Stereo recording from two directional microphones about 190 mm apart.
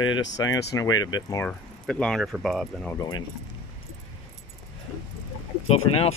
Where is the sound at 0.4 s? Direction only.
20° left (ahead or behind).